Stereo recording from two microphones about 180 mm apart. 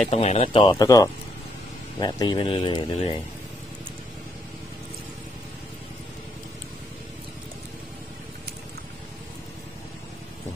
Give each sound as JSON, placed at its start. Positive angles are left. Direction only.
{"t": 0.1, "sound": "speech", "side_deg": 35}